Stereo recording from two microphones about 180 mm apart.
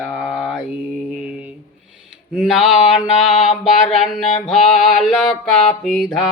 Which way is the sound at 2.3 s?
Centre (ahead or behind).